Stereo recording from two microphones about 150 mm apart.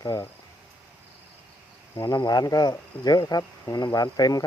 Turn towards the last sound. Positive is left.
turn(degrees=25)  # may be behind; listen again after turning